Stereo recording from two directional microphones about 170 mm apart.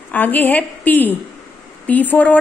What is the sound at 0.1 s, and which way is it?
A woman's voice, 10° left (ahead or behind).